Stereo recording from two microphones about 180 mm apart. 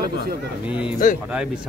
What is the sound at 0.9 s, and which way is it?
Speech, 50° left (ahead or behind).